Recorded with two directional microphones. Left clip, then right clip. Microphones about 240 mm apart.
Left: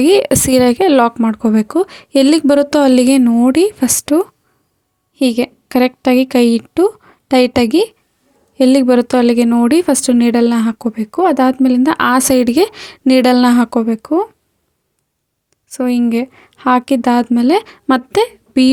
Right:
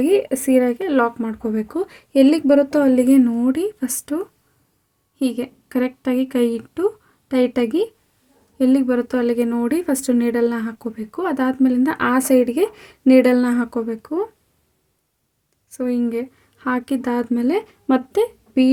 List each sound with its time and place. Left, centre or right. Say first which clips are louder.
0.0 s a woman's voice: left 7 dB; left
15.7 s speech: left 6 dB; left